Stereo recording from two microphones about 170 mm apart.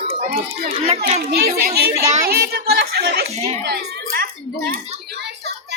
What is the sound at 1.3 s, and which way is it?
A child's voice, 65° right (ahead or behind).